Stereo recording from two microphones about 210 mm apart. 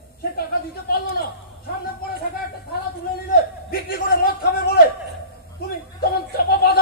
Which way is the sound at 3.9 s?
45° left (ahead or behind).